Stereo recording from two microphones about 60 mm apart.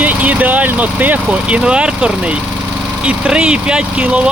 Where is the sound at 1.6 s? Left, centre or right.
Centre.